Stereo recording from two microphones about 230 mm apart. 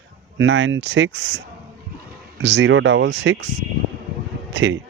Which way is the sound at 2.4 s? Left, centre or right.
Right.